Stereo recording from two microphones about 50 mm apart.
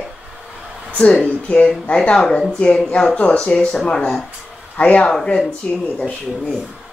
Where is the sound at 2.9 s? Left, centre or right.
Left.